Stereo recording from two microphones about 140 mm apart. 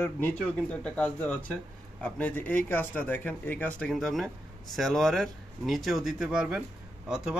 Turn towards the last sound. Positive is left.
turn(degrees=-5)  # may be behind; listen again after turning